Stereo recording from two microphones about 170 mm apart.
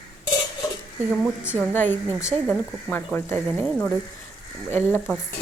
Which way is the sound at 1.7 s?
10° left (ahead or behind).